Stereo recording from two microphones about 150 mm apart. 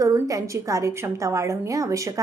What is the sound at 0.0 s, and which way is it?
A woman's voice, 20° right (ahead or behind).